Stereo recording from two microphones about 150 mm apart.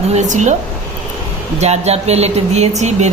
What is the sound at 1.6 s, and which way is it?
Speech, 45° right (ahead or behind).